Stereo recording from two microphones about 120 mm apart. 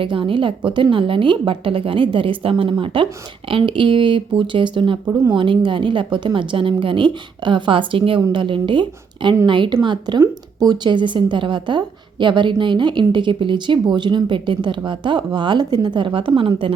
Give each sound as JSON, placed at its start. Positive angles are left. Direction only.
{"t": 0.0, "sound": "a woman's voice", "side_deg": -45}